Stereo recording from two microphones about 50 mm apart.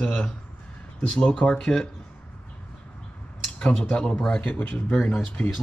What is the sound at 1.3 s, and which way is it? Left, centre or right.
Speech, centre.